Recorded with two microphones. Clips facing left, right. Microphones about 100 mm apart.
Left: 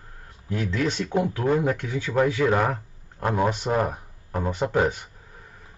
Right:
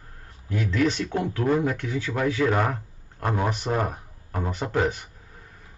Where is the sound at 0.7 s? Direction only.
20° left (ahead or behind).